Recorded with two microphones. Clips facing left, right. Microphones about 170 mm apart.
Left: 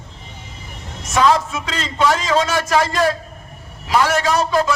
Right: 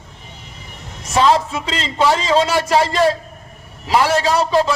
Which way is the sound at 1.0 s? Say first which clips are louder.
Right 1 dB; 30° right (ahead or behind).